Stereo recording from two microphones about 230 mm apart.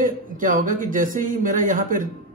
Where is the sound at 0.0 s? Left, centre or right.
Right.